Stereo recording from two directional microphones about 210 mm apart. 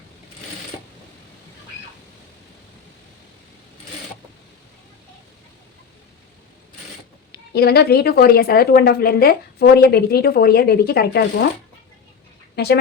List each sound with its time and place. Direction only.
7.3 s speech: 50° left (ahead or behind)
12.5 s a woman's voice: 50° left (ahead or behind)